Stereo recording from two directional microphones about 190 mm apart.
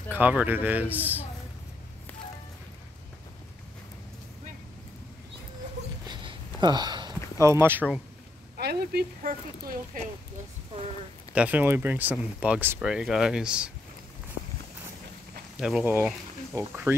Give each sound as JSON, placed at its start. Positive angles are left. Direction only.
{"t": 0.1, "sound": "speech", "side_deg": -10}
{"t": 6.0, "sound": "a sound", "side_deg": -20}
{"t": 7.3, "sound": "speech", "side_deg": -15}
{"t": 8.5, "sound": "speech", "side_deg": -60}
{"t": 9.9, "sound": "speech", "side_deg": -45}
{"t": 11.3, "sound": "speech", "side_deg": -10}
{"t": 15.6, "sound": "speech", "side_deg": -5}